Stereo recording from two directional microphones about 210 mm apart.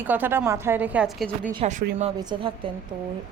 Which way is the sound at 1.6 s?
30° right (ahead or behind).